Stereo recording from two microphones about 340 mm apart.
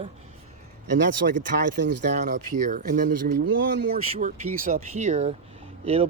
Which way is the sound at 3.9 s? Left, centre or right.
Right.